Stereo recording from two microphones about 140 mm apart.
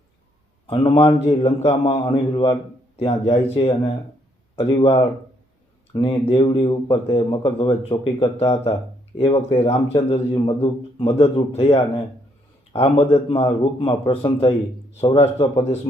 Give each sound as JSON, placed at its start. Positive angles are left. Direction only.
{"t": 0.7, "sound": "a man's voice", "side_deg": 40}